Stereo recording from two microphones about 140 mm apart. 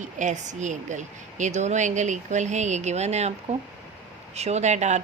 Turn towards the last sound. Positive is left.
turn(degrees=-55)  # may be behind; listen again after turning